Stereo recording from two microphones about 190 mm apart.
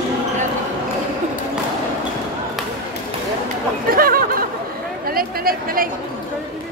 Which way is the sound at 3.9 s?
50° right (ahead or behind).